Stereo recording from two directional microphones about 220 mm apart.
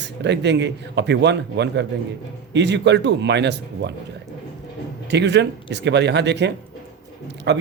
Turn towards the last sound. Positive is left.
turn(degrees=-50)  # may be behind; listen again after turning